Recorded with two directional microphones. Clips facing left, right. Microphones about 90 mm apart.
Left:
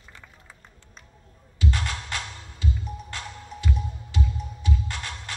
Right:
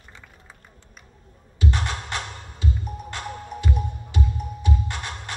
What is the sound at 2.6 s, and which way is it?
Music, 50° right (ahead or behind).